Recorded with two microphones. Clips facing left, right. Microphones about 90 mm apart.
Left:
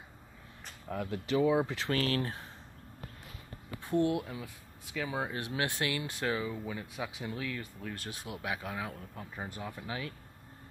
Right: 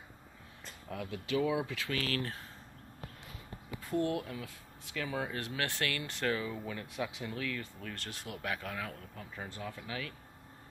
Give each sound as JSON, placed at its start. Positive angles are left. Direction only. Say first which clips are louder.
{"t": 0.8, "sound": "speech", "louder": "left 4 dB", "side_deg": 35}
{"t": 3.8, "sound": "speech", "louder": "left 3 dB", "side_deg": 20}